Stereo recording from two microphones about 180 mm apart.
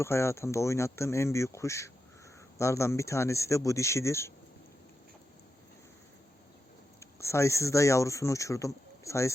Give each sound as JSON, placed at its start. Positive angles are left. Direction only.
{"t": 0.0, "sound": "speech", "side_deg": 15}
{"t": 7.0, "sound": "speech", "side_deg": 15}